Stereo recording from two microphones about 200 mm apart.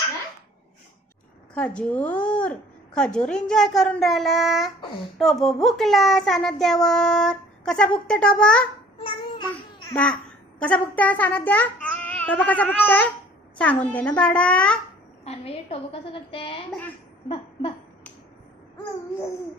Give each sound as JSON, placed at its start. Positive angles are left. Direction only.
{"t": 1.5, "sound": "a woman's voice", "side_deg": 5}
{"t": 9.0, "sound": "babbling", "side_deg": 25}
{"t": 9.9, "sound": "a woman's voice", "side_deg": 5}
{"t": 15.2, "sound": "a woman's voice", "side_deg": 30}
{"t": 17.2, "sound": "a sound", "side_deg": 25}